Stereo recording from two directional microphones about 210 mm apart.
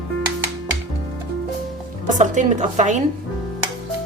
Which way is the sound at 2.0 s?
35° right (ahead or behind).